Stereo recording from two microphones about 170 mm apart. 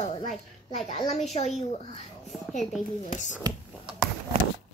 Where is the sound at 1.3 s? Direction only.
40° left (ahead or behind).